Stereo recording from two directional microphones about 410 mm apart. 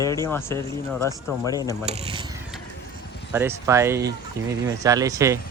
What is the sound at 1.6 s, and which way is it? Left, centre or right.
Speech, centre.